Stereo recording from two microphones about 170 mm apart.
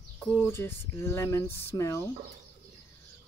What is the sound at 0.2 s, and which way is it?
Speech, 10° left (ahead or behind).